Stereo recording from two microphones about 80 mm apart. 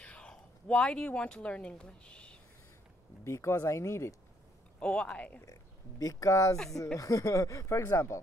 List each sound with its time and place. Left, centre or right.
0.0 s speech: centre
3.3 s speech: left
4.7 s speech: centre
5.4 s speech: left
6.5 s speech: centre
7.0 s speech: left